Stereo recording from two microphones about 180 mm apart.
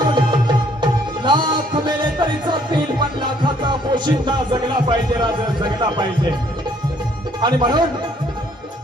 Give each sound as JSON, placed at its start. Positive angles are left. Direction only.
{"t": 0.0, "sound": "music", "side_deg": -25}
{"t": 7.4, "sound": "speech", "side_deg": -25}